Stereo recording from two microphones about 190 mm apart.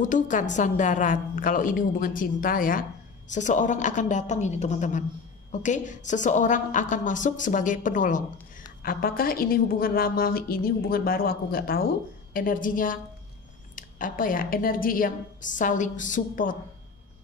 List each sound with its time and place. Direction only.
0.0 s a woman's voice: 40° left (ahead or behind)